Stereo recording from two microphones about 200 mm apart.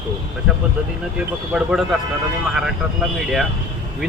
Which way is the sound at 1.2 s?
5° right (ahead or behind).